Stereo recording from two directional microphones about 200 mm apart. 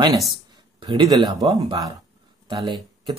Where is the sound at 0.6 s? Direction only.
25° right (ahead or behind).